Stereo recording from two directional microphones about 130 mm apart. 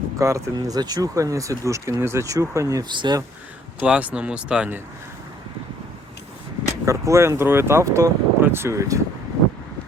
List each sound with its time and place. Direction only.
0.2 s speech: 25° right (ahead or behind)
2.9 s speech: 35° right (ahead or behind)
3.8 s speech: 10° right (ahead or behind)
6.8 s speech: 25° right (ahead or behind)